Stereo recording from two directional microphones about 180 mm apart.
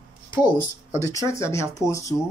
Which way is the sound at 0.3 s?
25° left (ahead or behind).